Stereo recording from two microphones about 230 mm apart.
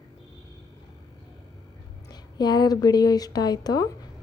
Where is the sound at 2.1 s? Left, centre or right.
Centre.